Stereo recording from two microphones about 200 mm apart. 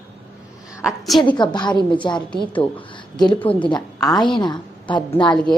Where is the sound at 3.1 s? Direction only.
25° left (ahead or behind).